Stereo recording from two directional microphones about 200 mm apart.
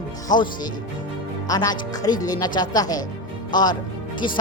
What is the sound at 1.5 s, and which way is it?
A man's voice, 20° left (ahead or behind).